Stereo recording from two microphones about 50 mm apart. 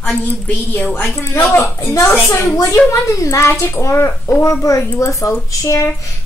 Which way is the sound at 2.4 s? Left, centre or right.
Left.